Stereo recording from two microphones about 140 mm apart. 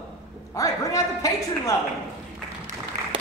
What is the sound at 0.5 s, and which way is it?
A woman's voice, 20° left (ahead or behind).